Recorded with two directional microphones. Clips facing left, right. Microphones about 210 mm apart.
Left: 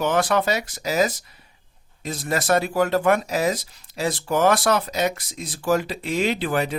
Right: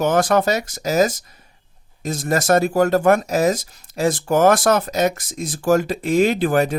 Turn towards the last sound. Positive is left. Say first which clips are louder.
# right 6 dB
turn(degrees=-45)  # may be behind; listen again after turning